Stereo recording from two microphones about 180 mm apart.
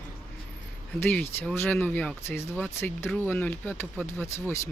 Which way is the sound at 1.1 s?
5° left (ahead or behind).